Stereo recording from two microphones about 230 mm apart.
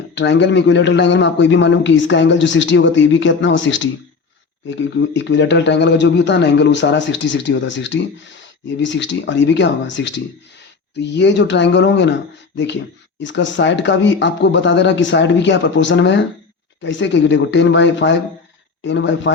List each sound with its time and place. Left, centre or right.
0.1 s a man's voice: left